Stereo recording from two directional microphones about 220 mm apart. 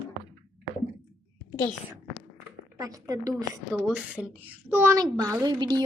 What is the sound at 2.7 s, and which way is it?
Speech, 15° right (ahead or behind).